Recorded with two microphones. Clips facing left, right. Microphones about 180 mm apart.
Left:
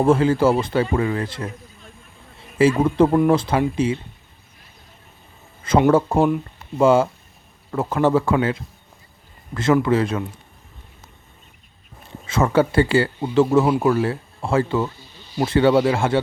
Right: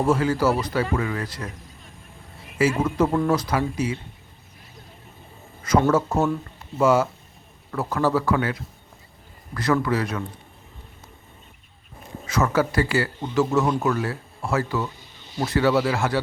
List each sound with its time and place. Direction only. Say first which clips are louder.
0.0 s speech: left 5 dB; 25° left (ahead or behind)
2.6 s speech: left 5 dB; 30° left (ahead or behind)
5.9 s speech: left 4 dB; 30° left (ahead or behind)
9.7 s speech: left 6 dB; 25° left (ahead or behind)
12.2 s speech: left 4 dB; 30° left (ahead or behind)
14.9 s snake: left 2 dB; 20° right (ahead or behind)
15.4 s speech: left 4 dB; 25° left (ahead or behind)